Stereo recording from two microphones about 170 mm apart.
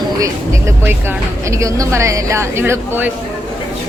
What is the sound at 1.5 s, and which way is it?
Speech, 20° right (ahead or behind).